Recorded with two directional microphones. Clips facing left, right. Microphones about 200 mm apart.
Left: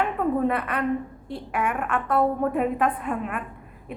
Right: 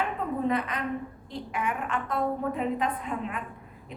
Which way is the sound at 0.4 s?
60° left (ahead or behind).